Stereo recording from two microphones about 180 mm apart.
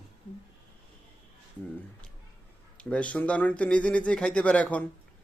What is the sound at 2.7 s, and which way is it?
Speech, 5° left (ahead or behind).